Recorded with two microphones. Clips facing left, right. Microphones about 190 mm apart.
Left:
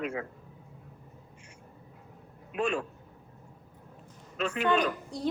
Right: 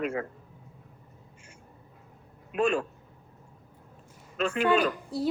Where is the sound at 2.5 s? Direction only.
45° right (ahead or behind).